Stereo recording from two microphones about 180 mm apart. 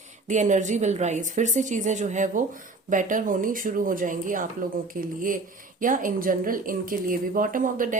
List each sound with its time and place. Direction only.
0.3 s speech: 45° right (ahead or behind)